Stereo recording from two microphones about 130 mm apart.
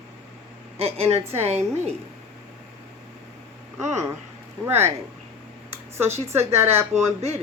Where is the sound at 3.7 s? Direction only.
65° right (ahead or behind).